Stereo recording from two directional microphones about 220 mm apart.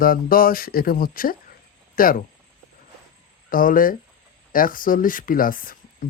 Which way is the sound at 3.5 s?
40° left (ahead or behind).